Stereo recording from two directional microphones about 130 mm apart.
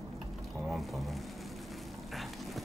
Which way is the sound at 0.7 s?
Centre (ahead or behind).